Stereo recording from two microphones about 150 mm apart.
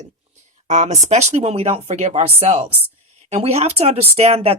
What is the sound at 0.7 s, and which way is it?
Speech, 50° right (ahead or behind).